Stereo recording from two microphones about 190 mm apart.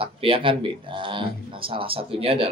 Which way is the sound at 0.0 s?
30° right (ahead or behind).